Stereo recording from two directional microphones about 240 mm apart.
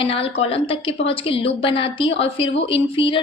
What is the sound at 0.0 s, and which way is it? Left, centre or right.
A woman's voice, left.